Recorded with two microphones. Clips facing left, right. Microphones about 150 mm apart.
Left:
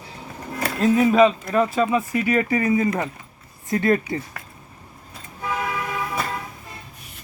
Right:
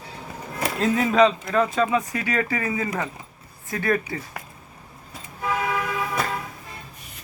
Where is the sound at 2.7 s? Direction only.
25° left (ahead or behind).